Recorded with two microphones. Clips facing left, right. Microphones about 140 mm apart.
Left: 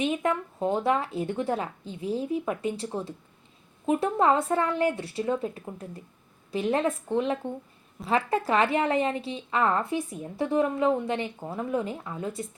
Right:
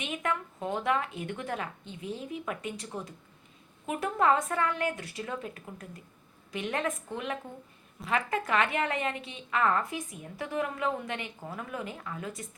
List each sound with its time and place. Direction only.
0.0 s a woman's voice: 30° left (ahead or behind)